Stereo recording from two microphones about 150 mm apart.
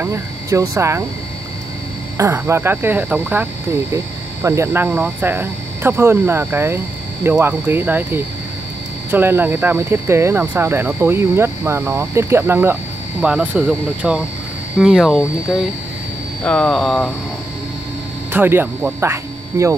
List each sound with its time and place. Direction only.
0.0 s speech: 20° right (ahead or behind)
2.1 s speech: 15° right (ahead or behind); by 15.1 s centre (ahead or behind)
16.4 s speech: 5° left (ahead or behind)
18.3 s speech: 15° right (ahead or behind)